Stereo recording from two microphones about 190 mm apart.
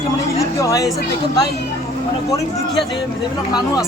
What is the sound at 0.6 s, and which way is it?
Speech, 15° left (ahead or behind).